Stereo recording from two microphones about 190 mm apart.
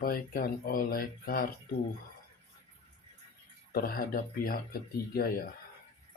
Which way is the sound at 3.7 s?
50° left (ahead or behind).